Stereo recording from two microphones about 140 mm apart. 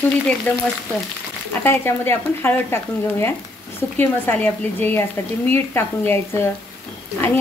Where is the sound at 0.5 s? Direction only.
10° left (ahead or behind).